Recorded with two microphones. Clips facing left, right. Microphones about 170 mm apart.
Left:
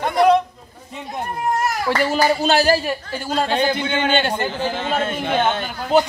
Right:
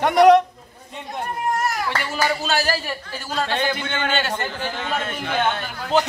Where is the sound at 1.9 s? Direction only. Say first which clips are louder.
Left 6 dB; 35° left (ahead or behind).